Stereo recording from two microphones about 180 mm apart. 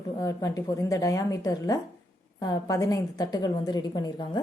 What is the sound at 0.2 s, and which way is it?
A woman's voice, 20° left (ahead or behind).